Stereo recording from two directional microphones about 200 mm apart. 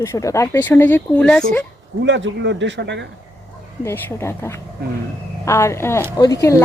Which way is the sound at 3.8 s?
15° left (ahead or behind).